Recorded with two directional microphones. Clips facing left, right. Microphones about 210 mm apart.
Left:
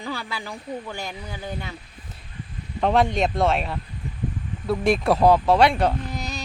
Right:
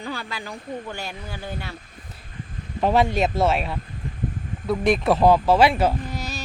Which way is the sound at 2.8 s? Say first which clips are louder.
Right 1 dB; 5° right (ahead or behind).